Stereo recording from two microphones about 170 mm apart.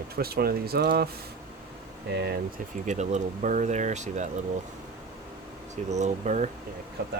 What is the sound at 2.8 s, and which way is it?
Speech, 45° right (ahead or behind).